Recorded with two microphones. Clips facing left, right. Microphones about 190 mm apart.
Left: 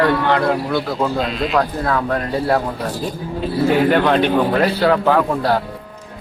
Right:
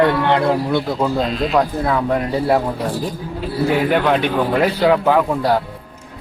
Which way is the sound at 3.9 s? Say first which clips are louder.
Left 2 dB; 10° right (ahead or behind).